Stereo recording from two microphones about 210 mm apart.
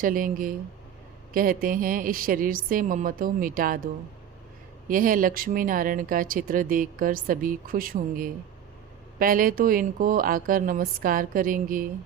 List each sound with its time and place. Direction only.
0.0 s speech: 40° right (ahead or behind)
4.9 s speech: 40° right (ahead or behind)